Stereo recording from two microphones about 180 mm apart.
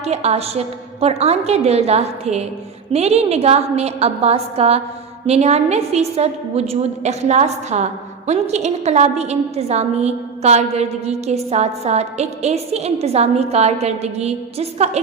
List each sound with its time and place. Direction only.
0.0 s a woman's voice: 35° right (ahead or behind)